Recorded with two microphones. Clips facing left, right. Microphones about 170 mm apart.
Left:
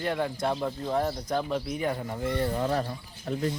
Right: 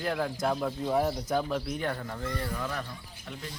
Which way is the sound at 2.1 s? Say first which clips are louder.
Left 6 dB; 20° left (ahead or behind).